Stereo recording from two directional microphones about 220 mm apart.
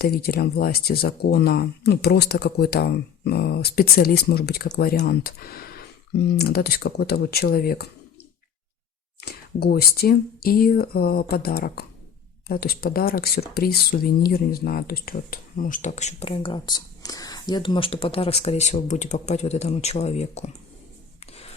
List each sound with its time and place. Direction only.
0.0 s speech: 45° left (ahead or behind)
9.2 s speech: 45° left (ahead or behind); by 20.5 s 30° left (ahead or behind)
21.2 s rub: 25° left (ahead or behind)